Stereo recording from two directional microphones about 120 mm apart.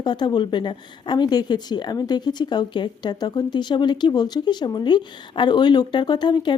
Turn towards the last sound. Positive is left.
turn(degrees=40)  # may be behind; listen again after turning